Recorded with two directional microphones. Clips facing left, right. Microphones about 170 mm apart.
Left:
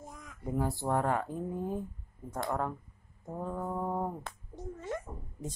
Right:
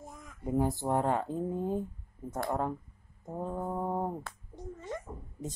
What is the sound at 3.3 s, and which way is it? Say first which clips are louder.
Speech: right 1 dB; 25° right (ahead or behind).